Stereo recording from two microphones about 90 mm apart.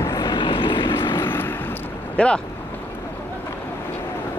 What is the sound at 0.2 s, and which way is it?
Vehicle, 65° left (ahead or behind).